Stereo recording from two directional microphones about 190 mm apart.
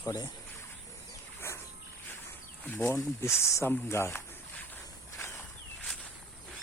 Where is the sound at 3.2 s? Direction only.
15° left (ahead or behind).